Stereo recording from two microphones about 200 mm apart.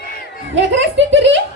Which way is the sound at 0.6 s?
65° right (ahead or behind).